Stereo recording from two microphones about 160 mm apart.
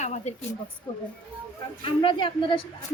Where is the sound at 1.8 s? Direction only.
30° left (ahead or behind).